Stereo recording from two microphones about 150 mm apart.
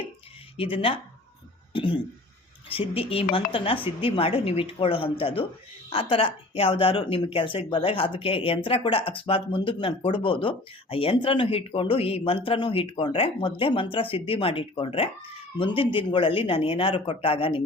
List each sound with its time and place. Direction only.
0.5 s a woman's voice: 35° left (ahead or behind)